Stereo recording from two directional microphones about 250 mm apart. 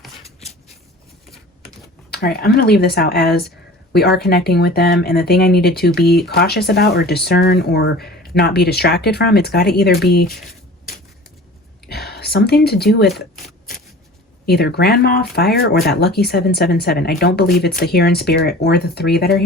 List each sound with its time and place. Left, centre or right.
0.2 s a sound: left
2.0 s speech: left
11.9 s speech: left
14.4 s speech: left